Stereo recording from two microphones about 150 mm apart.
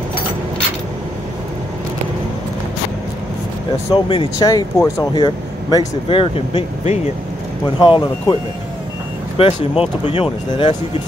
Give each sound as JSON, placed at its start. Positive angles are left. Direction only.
{"t": 3.9, "sound": "speech", "side_deg": 30}
{"t": 7.8, "sound": "speech", "side_deg": 30}
{"t": 9.4, "sound": "speech", "side_deg": 40}